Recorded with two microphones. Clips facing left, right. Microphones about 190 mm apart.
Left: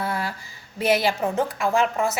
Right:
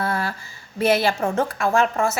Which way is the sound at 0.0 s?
15° left (ahead or behind).